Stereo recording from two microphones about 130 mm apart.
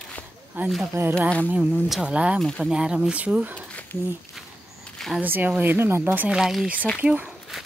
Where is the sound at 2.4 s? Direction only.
5° left (ahead or behind).